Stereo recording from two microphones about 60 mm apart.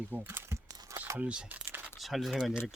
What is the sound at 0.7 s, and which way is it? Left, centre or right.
Crumpling, right.